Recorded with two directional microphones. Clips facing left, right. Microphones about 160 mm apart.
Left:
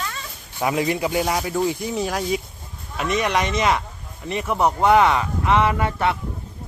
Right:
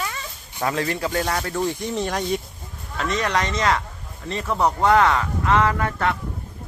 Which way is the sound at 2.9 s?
15° left (ahead or behind).